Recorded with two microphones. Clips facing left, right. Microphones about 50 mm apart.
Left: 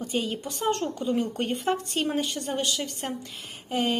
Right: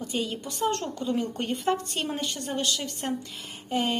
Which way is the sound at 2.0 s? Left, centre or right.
Centre.